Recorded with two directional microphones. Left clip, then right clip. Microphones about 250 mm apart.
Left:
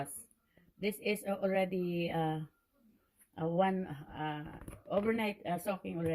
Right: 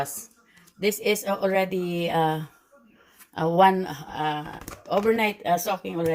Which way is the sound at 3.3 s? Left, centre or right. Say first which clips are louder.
Right 14 dB; centre.